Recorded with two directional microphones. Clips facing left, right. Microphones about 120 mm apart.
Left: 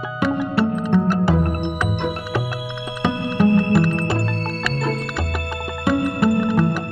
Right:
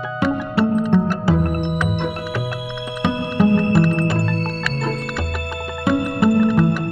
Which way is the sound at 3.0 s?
5° right (ahead or behind).